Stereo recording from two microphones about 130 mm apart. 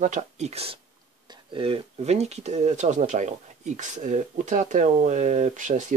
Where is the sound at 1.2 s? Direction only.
35° right (ahead or behind); by 6.0 s 75° right (ahead or behind).